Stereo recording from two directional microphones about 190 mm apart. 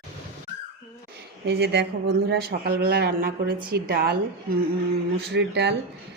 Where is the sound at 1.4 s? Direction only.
60° right (ahead or behind).